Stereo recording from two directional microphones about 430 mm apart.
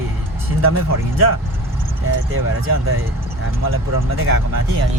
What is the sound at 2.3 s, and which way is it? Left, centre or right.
Speech, right.